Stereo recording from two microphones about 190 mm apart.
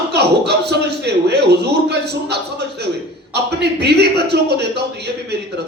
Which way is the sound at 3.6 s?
60° right (ahead or behind).